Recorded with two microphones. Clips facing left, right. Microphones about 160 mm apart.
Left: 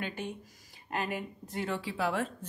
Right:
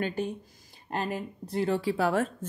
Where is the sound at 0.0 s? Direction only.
40° right (ahead or behind).